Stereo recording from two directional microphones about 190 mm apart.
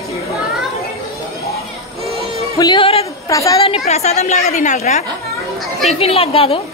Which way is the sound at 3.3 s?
15° left (ahead or behind).